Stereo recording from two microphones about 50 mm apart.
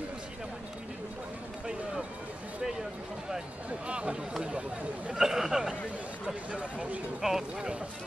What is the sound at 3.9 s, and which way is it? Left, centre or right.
Chatter, right.